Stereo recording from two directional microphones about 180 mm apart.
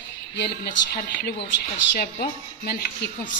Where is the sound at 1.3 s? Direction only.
75° left (ahead or behind); by 2.7 s 60° left (ahead or behind).